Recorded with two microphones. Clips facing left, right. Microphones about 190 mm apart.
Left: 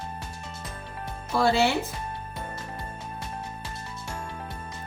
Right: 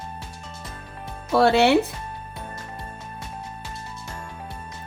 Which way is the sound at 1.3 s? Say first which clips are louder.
Right 6 dB; 70° right (ahead or behind).